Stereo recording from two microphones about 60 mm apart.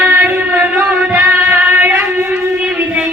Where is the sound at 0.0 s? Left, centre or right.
Right.